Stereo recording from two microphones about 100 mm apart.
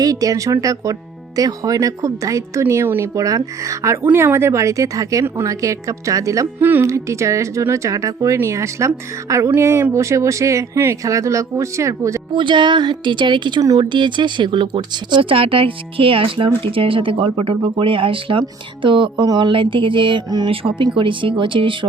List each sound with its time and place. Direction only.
0.0 s speech: 35° right (ahead or behind)
4.0 s speech: 20° right (ahead or behind)
6.6 s speech: 20° right (ahead or behind)
6.8 s speech: 30° right (ahead or behind)
12.3 s a woman's voice: 50° right (ahead or behind)
13.6 s speech: 35° right (ahead or behind)
13.8 s speech: 50° right (ahead or behind)
20.5 s speech: 60° right (ahead or behind)